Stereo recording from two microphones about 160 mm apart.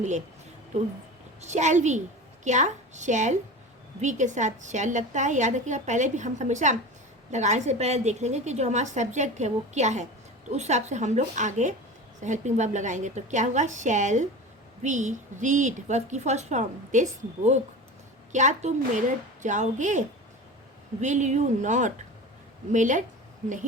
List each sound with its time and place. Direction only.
1.4 s a woman's voice: 45° right (ahead or behind)